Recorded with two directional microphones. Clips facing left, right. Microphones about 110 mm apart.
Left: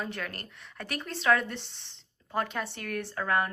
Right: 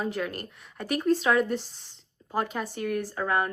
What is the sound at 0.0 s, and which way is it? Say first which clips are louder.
Speech: right 6 dB; 15° right (ahead or behind).